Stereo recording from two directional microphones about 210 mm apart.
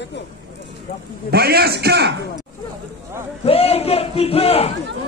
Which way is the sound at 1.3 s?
50° right (ahead or behind).